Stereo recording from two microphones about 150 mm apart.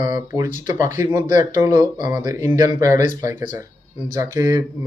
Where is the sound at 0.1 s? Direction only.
15° right (ahead or behind).